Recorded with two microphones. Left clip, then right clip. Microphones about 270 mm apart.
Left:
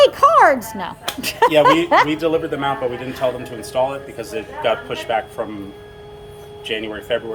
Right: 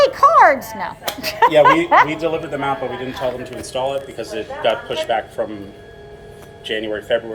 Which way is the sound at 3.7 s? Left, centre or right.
Left.